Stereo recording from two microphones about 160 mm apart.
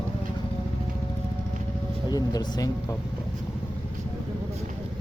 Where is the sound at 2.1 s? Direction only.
25° left (ahead or behind).